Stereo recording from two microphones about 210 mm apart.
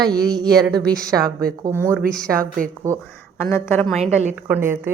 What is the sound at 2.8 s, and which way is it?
Speech, 15° right (ahead or behind).